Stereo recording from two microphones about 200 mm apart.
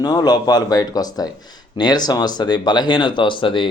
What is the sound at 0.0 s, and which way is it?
Speech, 20° left (ahead or behind).